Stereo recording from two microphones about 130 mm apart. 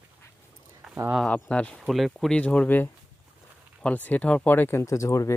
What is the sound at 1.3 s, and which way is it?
Speech, 10° left (ahead or behind).